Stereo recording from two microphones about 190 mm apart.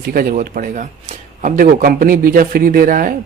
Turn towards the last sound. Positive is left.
turn(degrees=-45)  # may be behind; listen again after turning